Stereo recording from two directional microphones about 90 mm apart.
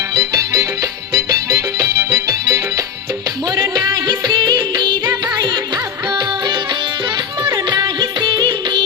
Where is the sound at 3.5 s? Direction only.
45° right (ahead or behind).